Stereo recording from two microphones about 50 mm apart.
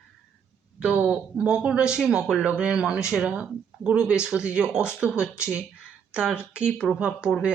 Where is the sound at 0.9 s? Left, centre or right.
Right.